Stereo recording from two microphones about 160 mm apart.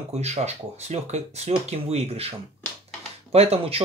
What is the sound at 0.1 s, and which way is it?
Speech, 40° right (ahead or behind).